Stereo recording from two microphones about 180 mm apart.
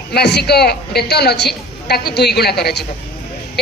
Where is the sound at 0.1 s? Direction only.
65° left (ahead or behind).